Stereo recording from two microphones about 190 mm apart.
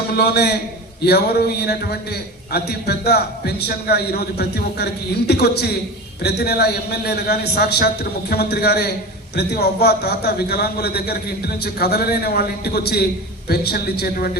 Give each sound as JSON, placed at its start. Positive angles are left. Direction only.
{"t": 0.1, "sound": "a man's voice", "side_deg": 55}